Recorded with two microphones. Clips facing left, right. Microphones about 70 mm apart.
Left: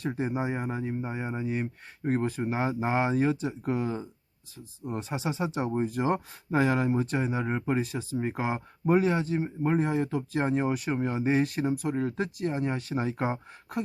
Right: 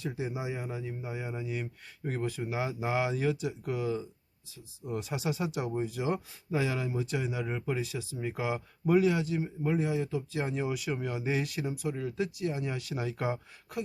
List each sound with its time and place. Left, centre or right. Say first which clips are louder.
0.0 s a man's voice: left 5 dB; left